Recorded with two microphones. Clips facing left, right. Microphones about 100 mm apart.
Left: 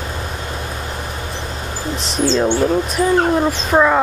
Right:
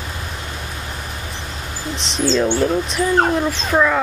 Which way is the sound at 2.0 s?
45° left (ahead or behind).